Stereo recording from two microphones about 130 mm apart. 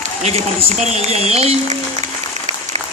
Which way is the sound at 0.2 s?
55° right (ahead or behind).